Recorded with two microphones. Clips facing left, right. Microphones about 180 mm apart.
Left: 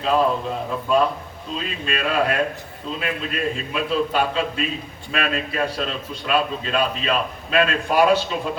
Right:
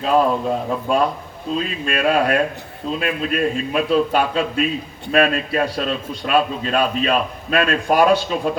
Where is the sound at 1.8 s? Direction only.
45° right (ahead or behind).